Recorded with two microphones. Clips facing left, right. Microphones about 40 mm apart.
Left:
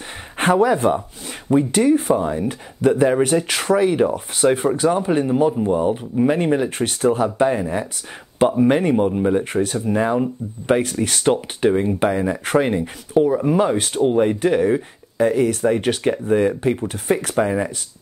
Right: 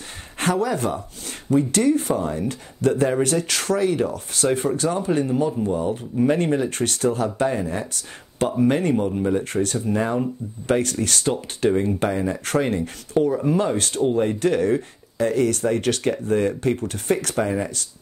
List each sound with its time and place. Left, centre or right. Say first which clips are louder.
0.4 s speech: left 6 dB; left
0.7 s speech: left 6 dB; centre